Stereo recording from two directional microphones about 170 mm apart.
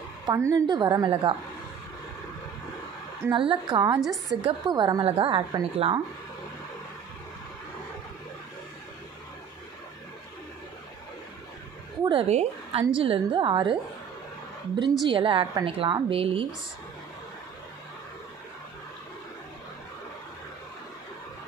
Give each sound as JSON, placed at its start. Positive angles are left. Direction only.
{"t": 0.3, "sound": "a woman's voice", "side_deg": -20}
{"t": 3.3, "sound": "a woman's voice", "side_deg": -30}
{"t": 4.0, "sound": "a woman's voice", "side_deg": 0}
{"t": 4.4, "sound": "a woman's voice", "side_deg": -25}
{"t": 12.0, "sound": "a woman's voice", "side_deg": -30}
{"t": 15.0, "sound": "a woman's voice", "side_deg": -30}